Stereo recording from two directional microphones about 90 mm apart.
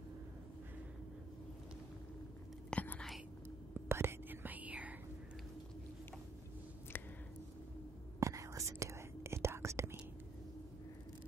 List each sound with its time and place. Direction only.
2.7 s whispering: 20° left (ahead or behind)
3.7 s whispering: 25° right (ahead or behind)
6.9 s a sound: 25° left (ahead or behind)
8.2 s whispering: 35° right (ahead or behind)